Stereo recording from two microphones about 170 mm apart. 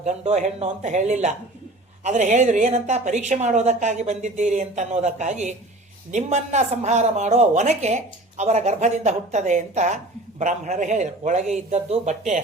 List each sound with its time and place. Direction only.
0.0 s a woman's voice: 40° right (ahead or behind)